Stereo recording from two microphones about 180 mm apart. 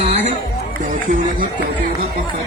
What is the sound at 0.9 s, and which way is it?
Speech, 50° right (ahead or behind).